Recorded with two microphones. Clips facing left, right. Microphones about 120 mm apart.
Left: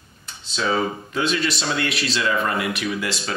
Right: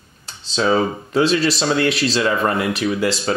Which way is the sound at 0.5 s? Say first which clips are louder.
Right 5 dB; 35° right (ahead or behind).